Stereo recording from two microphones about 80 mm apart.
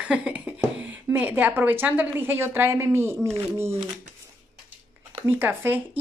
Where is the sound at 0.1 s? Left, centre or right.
Centre.